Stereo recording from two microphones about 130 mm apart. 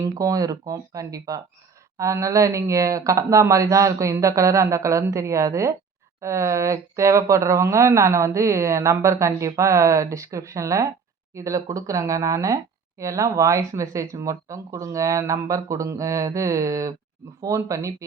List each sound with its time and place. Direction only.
0.0 s speech: 25° right (ahead or behind)